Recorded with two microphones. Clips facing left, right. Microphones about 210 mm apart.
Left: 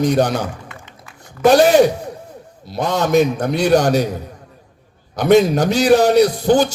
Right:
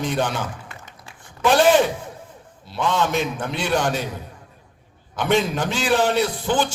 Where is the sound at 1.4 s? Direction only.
40° left (ahead or behind).